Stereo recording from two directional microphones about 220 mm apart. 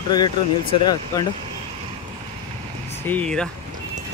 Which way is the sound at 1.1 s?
15° left (ahead or behind).